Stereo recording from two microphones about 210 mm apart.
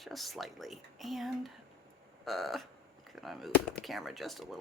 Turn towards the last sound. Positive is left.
turn(degrees=0)  # may be behind; listen again after turning